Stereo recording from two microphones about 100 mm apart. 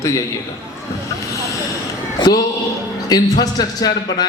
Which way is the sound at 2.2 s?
40° left (ahead or behind).